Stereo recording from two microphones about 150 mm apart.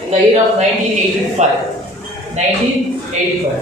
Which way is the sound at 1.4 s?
50° right (ahead or behind).